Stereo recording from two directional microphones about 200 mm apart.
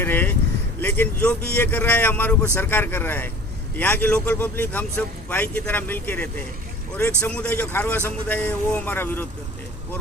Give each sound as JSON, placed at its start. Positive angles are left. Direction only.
{"t": 0.0, "sound": "speech", "side_deg": 10}